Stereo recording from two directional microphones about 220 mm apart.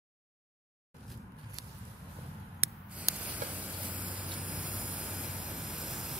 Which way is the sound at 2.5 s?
5° right (ahead or behind).